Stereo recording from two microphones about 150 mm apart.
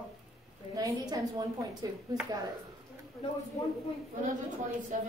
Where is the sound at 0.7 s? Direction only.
20° right (ahead or behind).